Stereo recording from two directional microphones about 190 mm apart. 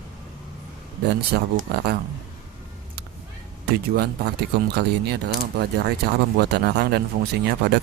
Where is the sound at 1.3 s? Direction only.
55° right (ahead or behind).